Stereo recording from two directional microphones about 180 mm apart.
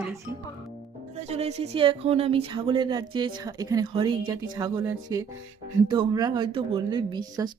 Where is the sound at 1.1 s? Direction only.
35° right (ahead or behind).